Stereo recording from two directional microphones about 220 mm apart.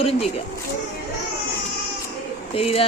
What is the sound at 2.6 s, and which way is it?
Speech, 25° left (ahead or behind).